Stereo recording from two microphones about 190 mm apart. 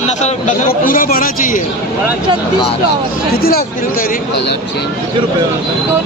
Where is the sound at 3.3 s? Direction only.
55° left (ahead or behind).